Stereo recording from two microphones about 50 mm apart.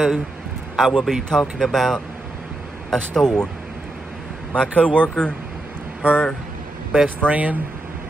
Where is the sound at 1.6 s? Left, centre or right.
Centre.